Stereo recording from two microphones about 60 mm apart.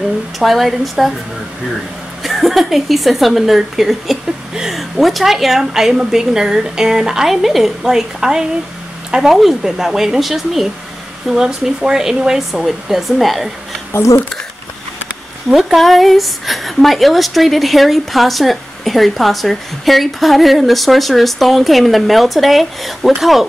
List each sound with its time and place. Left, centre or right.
0.4 s a woman's voice: centre
2.2 s a woman's voice: centre
13.9 s speech: left
15.5 s a woman's voice: centre